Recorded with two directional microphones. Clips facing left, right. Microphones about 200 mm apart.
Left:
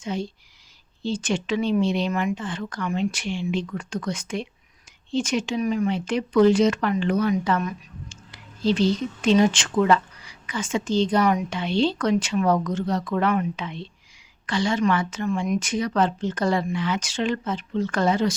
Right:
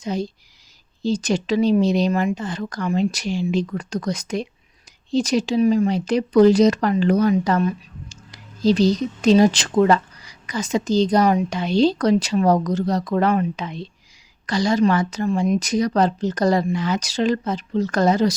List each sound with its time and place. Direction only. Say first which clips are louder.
0.0 s a woman's voice: right 4 dB; 40° right (ahead or behind)